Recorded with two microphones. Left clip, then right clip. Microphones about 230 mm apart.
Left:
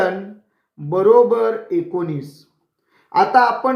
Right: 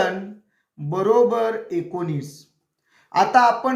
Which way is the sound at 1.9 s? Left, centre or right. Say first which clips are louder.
Left 4 dB; right.